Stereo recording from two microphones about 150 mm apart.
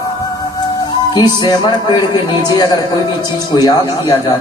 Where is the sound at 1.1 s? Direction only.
25° left (ahead or behind).